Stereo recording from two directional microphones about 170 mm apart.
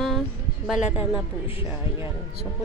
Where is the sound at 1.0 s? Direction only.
30° left (ahead or behind).